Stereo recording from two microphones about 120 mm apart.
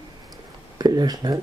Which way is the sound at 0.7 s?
35° right (ahead or behind).